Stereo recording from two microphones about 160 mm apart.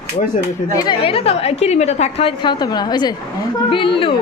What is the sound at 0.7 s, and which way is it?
A woman's voice, 30° left (ahead or behind).